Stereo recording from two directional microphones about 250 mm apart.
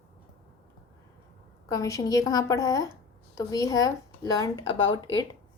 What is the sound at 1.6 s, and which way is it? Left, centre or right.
Speech, centre.